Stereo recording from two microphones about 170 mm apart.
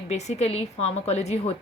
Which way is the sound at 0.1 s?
40° left (ahead or behind).